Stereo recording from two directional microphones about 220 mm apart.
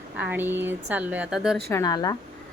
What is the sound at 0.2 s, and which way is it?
A woman's voice, 10° right (ahead or behind).